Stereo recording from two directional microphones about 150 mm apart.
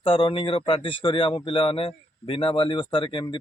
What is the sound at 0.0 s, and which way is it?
A man's voice, 35° left (ahead or behind).